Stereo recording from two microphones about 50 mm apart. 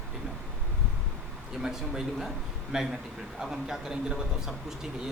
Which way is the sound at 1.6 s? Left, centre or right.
Centre.